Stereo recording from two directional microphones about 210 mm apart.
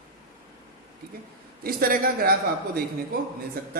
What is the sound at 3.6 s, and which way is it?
Speech, 45° right (ahead or behind).